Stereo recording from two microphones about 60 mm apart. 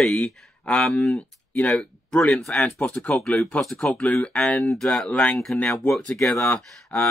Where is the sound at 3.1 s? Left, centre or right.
Centre.